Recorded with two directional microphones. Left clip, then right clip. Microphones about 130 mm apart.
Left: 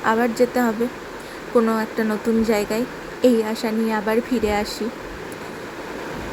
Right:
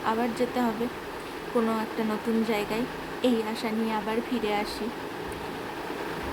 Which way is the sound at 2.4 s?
45° left (ahead or behind).